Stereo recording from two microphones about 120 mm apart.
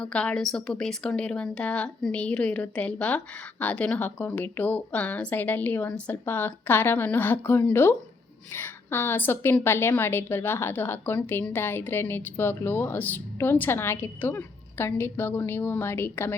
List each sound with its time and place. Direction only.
0.0 s a woman's voice: 10° left (ahead or behind)